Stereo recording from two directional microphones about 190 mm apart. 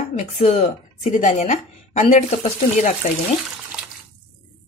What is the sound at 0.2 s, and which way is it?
Speech, 35° left (ahead or behind).